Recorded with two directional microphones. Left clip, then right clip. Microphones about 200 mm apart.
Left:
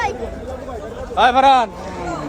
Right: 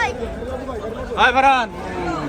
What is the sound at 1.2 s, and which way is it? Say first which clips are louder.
Speech: left 2 dB; 50° left (ahead or behind).